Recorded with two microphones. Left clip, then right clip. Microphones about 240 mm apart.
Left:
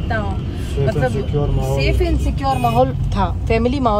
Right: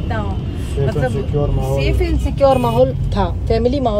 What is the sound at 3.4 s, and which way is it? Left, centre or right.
Speech, left.